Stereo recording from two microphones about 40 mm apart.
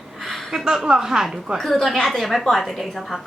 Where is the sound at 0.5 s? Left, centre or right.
Centre.